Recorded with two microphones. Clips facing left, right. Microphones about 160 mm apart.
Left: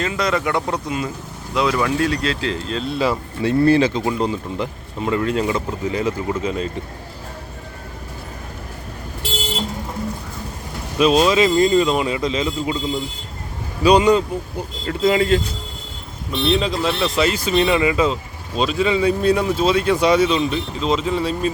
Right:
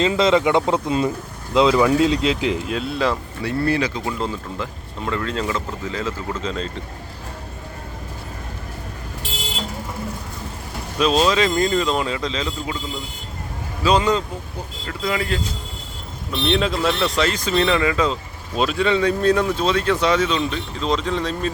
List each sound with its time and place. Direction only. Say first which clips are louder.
0.0 s speech: right 4 dB; 25° right (ahead or behind); by 3.2 s centre (ahead or behind)
3.4 s speech: left 6 dB; 25° left (ahead or behind); by 6.7 s 10° left (ahead or behind)
10.9 s speech: left 3 dB; 10° left (ahead or behind)
13.8 s speech: left 5 dB; 15° left (ahead or behind)
16.5 s speech: even; centre (ahead or behind)
18.5 s speech: left 1 dB; centre (ahead or behind)